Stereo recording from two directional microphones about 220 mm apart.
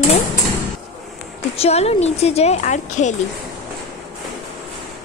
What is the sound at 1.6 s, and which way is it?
A woman's voice, 30° left (ahead or behind).